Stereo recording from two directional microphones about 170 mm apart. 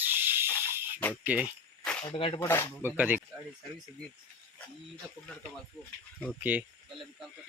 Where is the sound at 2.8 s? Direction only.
10° right (ahead or behind).